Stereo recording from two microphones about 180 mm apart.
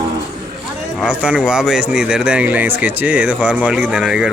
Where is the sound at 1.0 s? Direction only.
5° right (ahead or behind).